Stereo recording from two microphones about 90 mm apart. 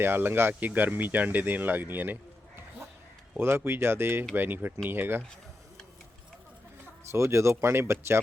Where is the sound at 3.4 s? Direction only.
25° right (ahead or behind).